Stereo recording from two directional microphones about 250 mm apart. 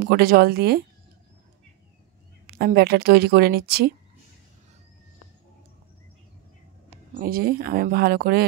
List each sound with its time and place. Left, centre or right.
0.0 s a woman's voice: right
2.4 s a woman's voice: right
7.2 s a woman's voice: right